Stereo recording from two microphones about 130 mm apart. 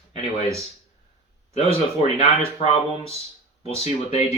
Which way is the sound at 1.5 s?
50° left (ahead or behind).